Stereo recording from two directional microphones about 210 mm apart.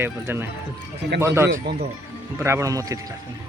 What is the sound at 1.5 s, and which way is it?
Speech, 45° right (ahead or behind).